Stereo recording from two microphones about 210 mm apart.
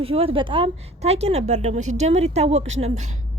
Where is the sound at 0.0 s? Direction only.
25° right (ahead or behind).